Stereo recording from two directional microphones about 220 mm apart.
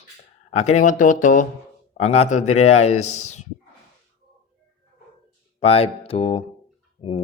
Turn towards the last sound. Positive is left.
turn(degrees=25)  # may be behind; listen again after turning